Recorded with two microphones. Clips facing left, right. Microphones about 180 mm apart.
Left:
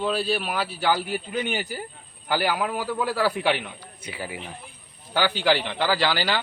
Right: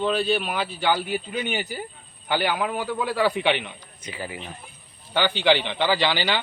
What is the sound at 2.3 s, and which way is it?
A man's voice, 5° left (ahead or behind).